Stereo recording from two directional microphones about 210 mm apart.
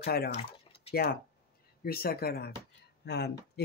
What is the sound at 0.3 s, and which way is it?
Drip, 30° left (ahead or behind).